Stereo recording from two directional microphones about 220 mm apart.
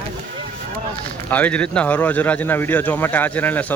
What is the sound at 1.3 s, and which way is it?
Speech, 5° left (ahead or behind).